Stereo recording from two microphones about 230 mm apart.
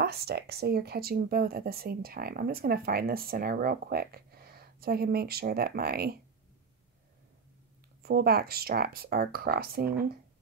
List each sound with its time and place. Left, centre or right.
0.0 s speech: right
8.0 s speech: right